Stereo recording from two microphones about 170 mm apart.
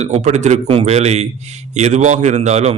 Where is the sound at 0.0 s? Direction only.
40° right (ahead or behind).